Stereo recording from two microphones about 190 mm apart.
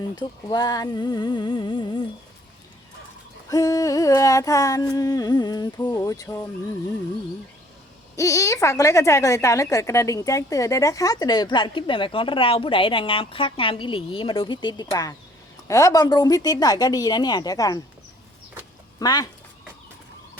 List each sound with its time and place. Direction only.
0.2 s a woman's voice: 20° left (ahead or behind)
3.5 s a sound: 20° left (ahead or behind)
8.1 s a woman's voice: 15° left (ahead or behind)
18.9 s a woman's voice: 20° left (ahead or behind)